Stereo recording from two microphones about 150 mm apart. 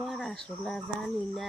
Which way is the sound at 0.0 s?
Centre (ahead or behind).